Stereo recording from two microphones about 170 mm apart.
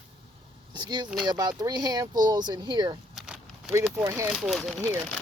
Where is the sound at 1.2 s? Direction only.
25° right (ahead or behind).